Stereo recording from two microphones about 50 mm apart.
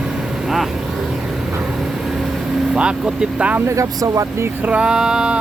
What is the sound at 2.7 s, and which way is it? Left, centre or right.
Vehicle, centre.